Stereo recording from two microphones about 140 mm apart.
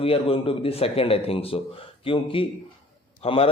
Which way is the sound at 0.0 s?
40° left (ahead or behind).